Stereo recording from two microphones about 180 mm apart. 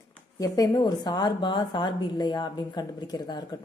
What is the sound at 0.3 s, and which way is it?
A woman's voice, 20° left (ahead or behind).